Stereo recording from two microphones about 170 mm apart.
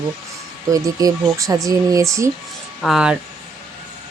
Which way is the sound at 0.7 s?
20° right (ahead or behind).